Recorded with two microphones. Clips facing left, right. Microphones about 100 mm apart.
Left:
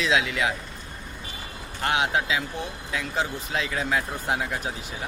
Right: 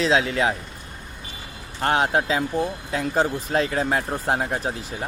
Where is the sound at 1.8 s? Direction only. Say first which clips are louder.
Right 4 dB; 40° right (ahead or behind).